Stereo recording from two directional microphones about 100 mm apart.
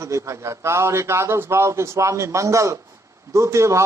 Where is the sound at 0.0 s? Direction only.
30° right (ahead or behind).